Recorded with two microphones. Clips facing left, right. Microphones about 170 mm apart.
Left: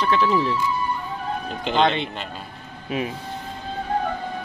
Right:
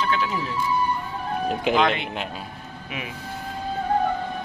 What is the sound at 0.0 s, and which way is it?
Speech, 35° left (ahead or behind).